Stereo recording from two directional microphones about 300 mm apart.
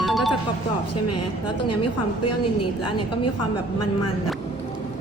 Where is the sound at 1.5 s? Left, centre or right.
Left.